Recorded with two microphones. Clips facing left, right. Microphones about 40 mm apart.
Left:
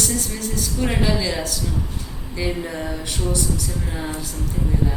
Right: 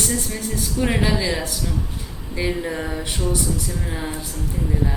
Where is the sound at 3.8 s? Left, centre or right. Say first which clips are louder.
Even; centre.